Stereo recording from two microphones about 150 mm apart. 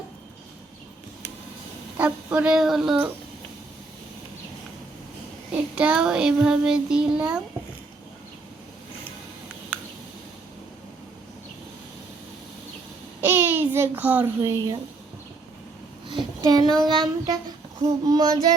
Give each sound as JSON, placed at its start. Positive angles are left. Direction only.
{"t": 2.0, "sound": "child singing", "side_deg": -10}
{"t": 5.5, "sound": "child singing", "side_deg": -5}
{"t": 13.2, "sound": "a child's voice", "side_deg": -15}
{"t": 16.0, "sound": "a child's voice", "side_deg": -30}
{"t": 18.0, "sound": "child singing", "side_deg": -25}